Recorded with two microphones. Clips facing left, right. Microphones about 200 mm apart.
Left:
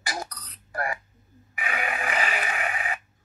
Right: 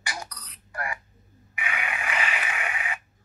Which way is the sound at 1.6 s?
35° left (ahead or behind).